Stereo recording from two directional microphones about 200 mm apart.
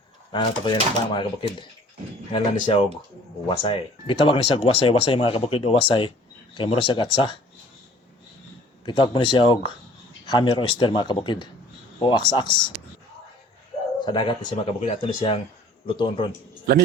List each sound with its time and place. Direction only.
0.3 s speech: 25° left (ahead or behind)
8.8 s speech: 25° left (ahead or behind)
14.0 s speech: 25° left (ahead or behind)